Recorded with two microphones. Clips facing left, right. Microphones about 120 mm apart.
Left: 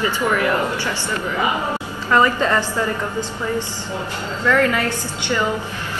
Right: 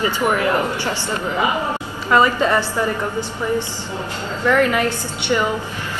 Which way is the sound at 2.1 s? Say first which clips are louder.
Right 1 dB; 20° right (ahead or behind).